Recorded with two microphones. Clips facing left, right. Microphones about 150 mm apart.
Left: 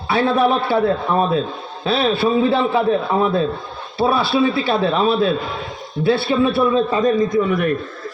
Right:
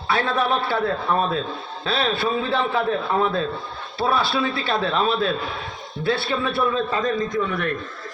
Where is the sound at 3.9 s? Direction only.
10° left (ahead or behind).